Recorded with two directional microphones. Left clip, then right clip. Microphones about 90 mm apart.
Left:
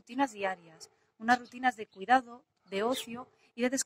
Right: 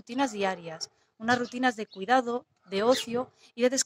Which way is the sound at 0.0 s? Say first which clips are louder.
Right 4 dB; 30° right (ahead or behind).